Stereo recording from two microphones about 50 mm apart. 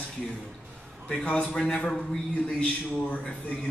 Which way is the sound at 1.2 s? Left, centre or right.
Left.